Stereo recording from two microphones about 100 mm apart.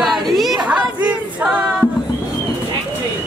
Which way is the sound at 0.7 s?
10° right (ahead or behind).